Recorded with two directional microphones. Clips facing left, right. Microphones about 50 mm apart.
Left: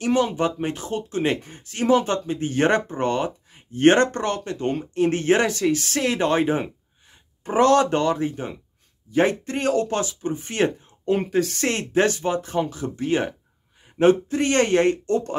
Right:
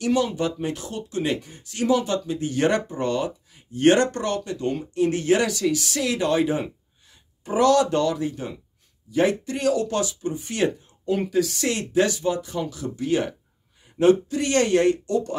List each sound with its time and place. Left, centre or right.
0.0 s speech: left